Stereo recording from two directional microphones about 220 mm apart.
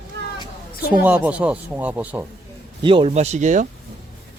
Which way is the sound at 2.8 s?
25° right (ahead or behind).